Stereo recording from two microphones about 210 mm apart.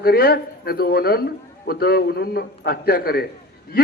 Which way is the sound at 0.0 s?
45° left (ahead or behind).